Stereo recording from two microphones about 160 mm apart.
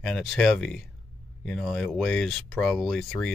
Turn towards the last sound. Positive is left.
turn(degrees=0)  # may be behind; listen again after turning